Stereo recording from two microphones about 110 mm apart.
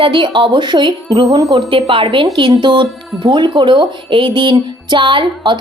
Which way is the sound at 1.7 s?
55° right (ahead or behind).